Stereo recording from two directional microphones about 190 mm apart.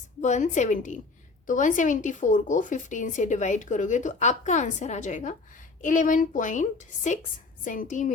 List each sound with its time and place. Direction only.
0.2 s a woman's voice: 40° left (ahead or behind)